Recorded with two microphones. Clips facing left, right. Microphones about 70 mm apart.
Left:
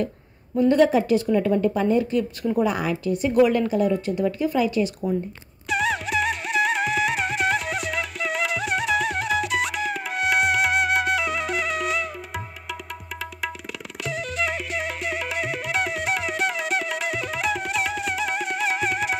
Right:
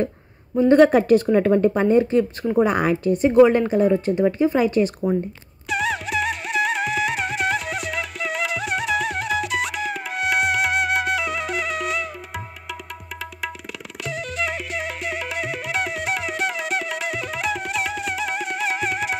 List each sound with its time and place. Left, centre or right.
0.7 s a woman's voice: right
5.7 s music: centre
14.0 s music: centre